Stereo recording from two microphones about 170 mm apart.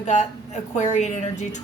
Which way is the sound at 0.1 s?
45° left (ahead or behind).